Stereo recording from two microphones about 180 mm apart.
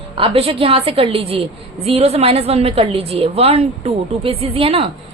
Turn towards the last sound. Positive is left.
turn(degrees=-30)  # may be behind; listen again after turning